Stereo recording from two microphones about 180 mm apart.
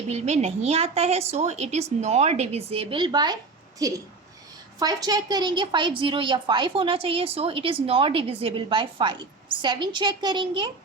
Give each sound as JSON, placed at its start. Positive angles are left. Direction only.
{"t": 0.1, "sound": "a woman's voice", "side_deg": -35}